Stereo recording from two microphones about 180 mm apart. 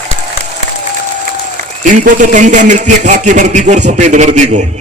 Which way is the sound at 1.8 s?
45° right (ahead or behind).